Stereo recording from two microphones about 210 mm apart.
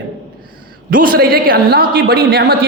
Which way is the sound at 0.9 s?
40° right (ahead or behind).